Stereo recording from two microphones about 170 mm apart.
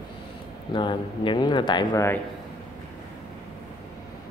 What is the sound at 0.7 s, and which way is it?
Speech, 30° left (ahead or behind).